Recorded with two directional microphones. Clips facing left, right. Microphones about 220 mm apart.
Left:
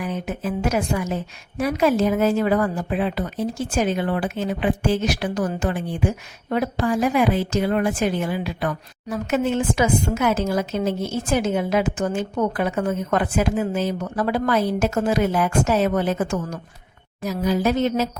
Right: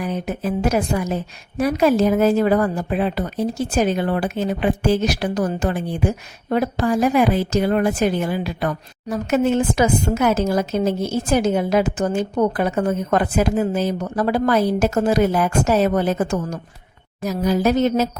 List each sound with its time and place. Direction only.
0.0 s a woman's voice: 35° right (ahead or behind)